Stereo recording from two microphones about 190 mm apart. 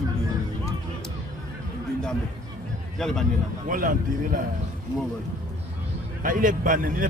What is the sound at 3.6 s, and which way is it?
Speech, 45° right (ahead or behind).